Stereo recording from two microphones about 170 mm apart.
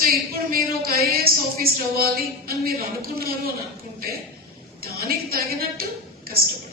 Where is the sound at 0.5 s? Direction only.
60° right (ahead or behind).